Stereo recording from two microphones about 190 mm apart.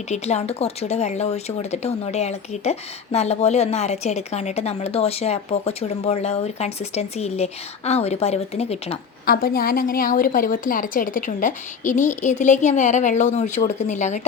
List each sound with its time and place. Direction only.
0.1 s speech: 35° left (ahead or behind)
9.2 s a woman's voice: 50° left (ahead or behind)